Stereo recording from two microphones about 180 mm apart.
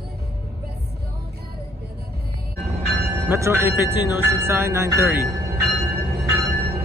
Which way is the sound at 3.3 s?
15° right (ahead or behind).